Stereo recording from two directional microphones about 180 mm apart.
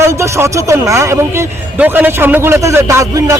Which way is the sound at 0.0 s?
15° right (ahead or behind).